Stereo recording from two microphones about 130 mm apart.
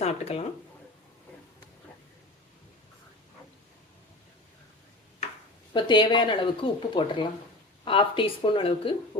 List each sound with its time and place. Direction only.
0.0 s speech: 55° left (ahead or behind)
5.7 s speech: 35° left (ahead or behind)